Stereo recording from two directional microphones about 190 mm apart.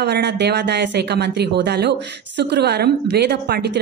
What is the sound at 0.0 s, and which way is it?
A woman's voice, 60° right (ahead or behind).